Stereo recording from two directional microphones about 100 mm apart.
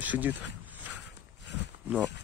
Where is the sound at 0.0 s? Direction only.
15° right (ahead or behind).